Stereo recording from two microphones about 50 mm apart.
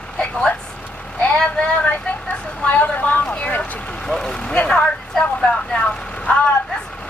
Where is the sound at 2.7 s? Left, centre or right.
Left.